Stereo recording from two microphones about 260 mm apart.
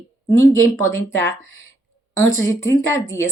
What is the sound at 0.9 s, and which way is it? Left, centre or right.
Speech, right.